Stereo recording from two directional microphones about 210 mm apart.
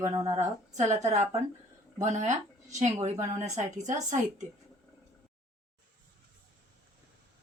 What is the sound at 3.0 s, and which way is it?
A woman's voice, 35° right (ahead or behind).